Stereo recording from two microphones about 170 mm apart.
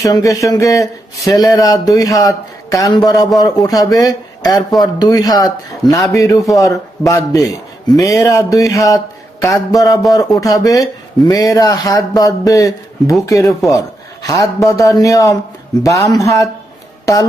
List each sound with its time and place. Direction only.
0.0 s speech: 20° left (ahead or behind)